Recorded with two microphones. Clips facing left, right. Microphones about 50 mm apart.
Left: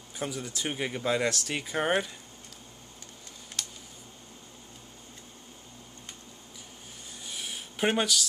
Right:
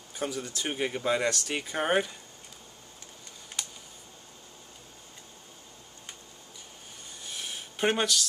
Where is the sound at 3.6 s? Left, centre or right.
Centre.